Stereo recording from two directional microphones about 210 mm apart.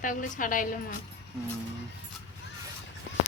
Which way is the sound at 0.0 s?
40° left (ahead or behind).